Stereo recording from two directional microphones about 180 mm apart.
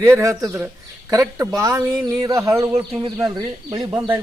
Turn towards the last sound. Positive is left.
turn(degrees=-15)  # may be behind; listen again after turning